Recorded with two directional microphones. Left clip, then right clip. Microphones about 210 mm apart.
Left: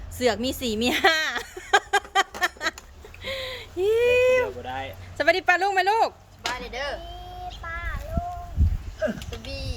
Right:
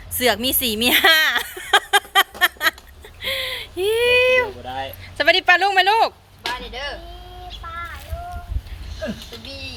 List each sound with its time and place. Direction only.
0.2 s a sound: centre (ahead or behind)
5.1 s speech: 5° left (ahead or behind)
6.4 s speech: 15° left (ahead or behind)